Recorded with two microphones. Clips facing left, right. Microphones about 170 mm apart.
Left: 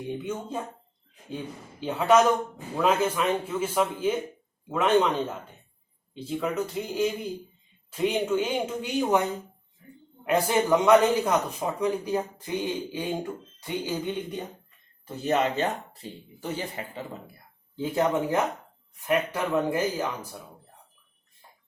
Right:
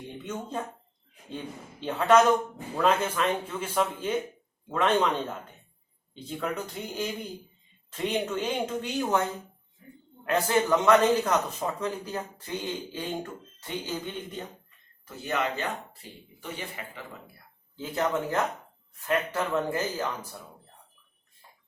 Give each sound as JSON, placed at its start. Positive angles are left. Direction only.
{"t": 0.2, "sound": "a man's voice", "side_deg": 5}
{"t": 1.8, "sound": "a man's voice", "side_deg": 10}
{"t": 10.2, "sound": "a man's voice", "side_deg": 15}
{"t": 15.0, "sound": "speech", "side_deg": 30}
{"t": 15.6, "sound": "speech", "side_deg": 40}
{"t": 17.7, "sound": "a man's voice", "side_deg": 15}